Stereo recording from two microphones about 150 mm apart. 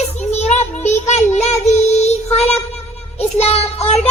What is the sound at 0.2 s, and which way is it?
Child singing, 50° left (ahead or behind).